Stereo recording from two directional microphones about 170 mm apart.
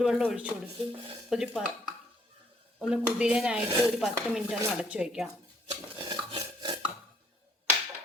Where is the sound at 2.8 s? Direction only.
5° right (ahead or behind).